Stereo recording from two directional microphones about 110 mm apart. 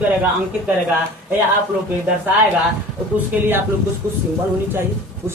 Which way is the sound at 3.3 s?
10° right (ahead or behind).